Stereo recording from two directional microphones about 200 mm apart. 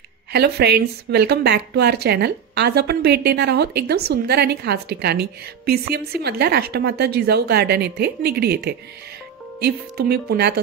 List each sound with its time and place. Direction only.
0.3 s a woman's voice: 55° right (ahead or behind)